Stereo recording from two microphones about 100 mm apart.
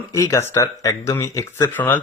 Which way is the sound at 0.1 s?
30° left (ahead or behind).